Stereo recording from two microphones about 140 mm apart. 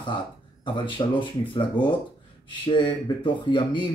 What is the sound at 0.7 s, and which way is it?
A man's voice, 35° left (ahead or behind).